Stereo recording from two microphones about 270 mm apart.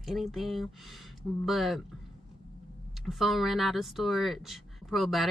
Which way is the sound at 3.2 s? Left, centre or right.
Centre.